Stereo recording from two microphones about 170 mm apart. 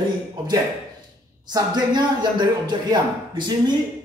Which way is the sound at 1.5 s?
25° right (ahead or behind).